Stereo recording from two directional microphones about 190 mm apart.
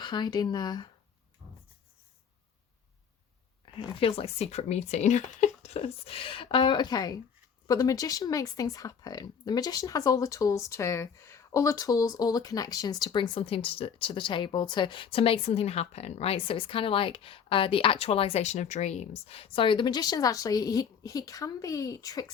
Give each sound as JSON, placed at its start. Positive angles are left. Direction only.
{"t": 0.0, "sound": "speech", "side_deg": 20}
{"t": 1.4, "sound": "writing", "side_deg": -35}
{"t": 3.8, "sound": "speech", "side_deg": 30}